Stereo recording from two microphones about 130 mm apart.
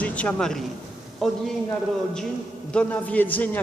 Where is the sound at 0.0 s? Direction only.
10° left (ahead or behind).